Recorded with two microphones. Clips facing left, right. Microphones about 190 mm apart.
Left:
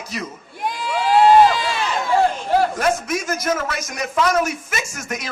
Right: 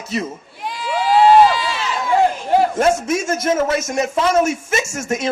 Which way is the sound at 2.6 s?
25° right (ahead or behind).